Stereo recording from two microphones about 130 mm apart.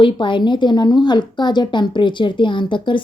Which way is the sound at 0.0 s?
40° left (ahead or behind).